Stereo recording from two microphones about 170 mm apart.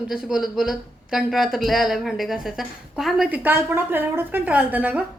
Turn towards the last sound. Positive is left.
turn(degrees=-10)  # may be behind; listen again after turning